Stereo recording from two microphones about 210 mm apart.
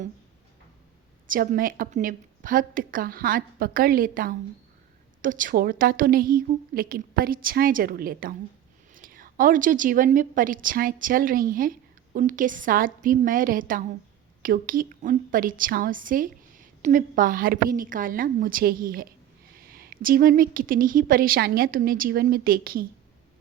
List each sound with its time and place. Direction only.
1.3 s a woman's voice: 40° right (ahead or behind)